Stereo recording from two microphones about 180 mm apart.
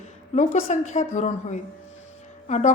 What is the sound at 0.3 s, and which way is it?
A woman's voice, 40° left (ahead or behind).